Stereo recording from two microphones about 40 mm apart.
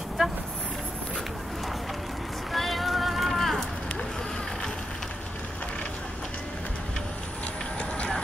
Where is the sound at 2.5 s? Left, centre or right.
Centre.